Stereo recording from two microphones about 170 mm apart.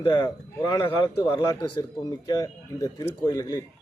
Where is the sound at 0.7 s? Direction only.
25° left (ahead or behind).